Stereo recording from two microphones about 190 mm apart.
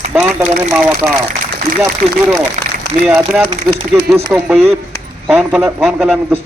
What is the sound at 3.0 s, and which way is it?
Speech, centre (ahead or behind).